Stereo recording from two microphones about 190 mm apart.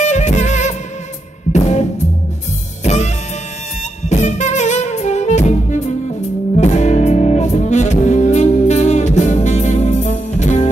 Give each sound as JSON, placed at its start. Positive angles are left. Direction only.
{"t": 0.0, "sound": "music", "side_deg": 40}
{"t": 4.1, "sound": "music", "side_deg": 40}